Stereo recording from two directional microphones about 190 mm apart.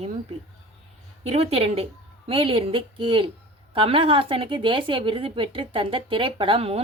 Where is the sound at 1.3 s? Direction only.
30° right (ahead or behind).